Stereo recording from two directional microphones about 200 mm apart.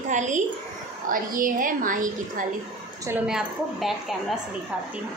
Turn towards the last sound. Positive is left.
turn(degrees=0)  # may be behind; listen again after turning